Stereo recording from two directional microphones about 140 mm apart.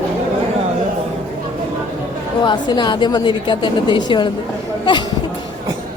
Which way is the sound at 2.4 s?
30° left (ahead or behind).